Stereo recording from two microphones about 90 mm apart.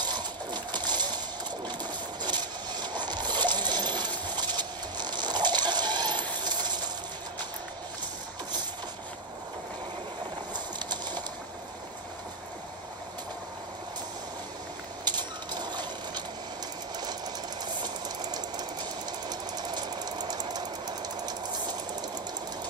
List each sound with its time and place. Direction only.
0.0 s a sound: 55° right (ahead or behind)
2.2 s coin: 55° right (ahead or behind)
4.3 s a sound: 50° right (ahead or behind)
6.4 s coin: 55° right (ahead or behind)
10.9 s pigeon: 55° right (ahead or behind)
15.0 s vehicle: 55° right (ahead or behind)
16.9 s sewing machine: 50° right (ahead or behind)